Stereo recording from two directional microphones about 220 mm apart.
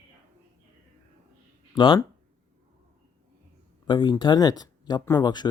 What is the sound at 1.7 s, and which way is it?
Speech, 20° left (ahead or behind).